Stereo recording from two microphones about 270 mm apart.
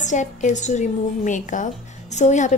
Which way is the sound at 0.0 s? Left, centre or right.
Left.